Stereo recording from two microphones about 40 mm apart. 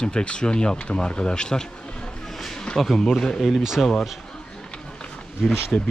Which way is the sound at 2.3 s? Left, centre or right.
Centre.